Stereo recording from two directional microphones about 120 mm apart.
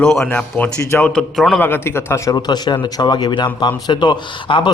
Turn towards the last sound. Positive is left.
turn(degrees=40)  # may be behind; listen again after turning